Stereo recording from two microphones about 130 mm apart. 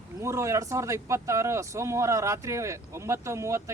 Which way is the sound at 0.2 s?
20° right (ahead or behind).